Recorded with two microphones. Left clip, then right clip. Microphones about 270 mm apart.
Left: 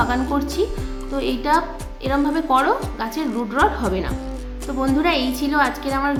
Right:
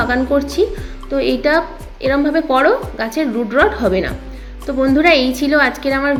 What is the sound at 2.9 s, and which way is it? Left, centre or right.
A woman's voice, centre.